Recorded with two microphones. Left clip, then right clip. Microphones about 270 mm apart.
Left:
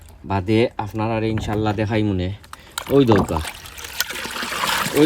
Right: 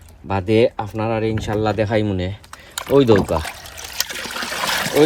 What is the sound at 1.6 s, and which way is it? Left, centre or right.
Speech, centre.